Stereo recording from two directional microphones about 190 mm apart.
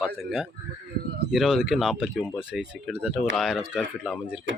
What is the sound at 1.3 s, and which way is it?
Speech, centre (ahead or behind).